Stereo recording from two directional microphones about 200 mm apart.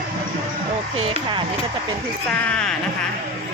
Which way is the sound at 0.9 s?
30° right (ahead or behind).